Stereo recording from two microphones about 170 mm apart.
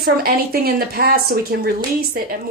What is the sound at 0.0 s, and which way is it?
Speech, 60° right (ahead or behind).